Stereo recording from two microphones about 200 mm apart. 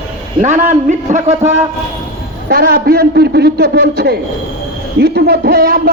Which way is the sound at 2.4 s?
50° right (ahead or behind).